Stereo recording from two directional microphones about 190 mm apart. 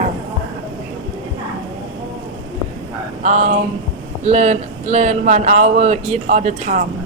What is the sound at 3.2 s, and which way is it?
A man's voice, 40° right (ahead or behind).